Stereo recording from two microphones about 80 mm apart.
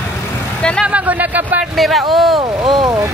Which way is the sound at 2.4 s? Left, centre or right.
Right.